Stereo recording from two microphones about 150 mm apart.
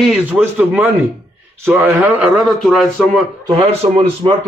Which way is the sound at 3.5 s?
45° right (ahead or behind).